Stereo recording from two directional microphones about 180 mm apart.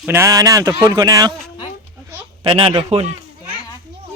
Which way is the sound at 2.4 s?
30° right (ahead or behind).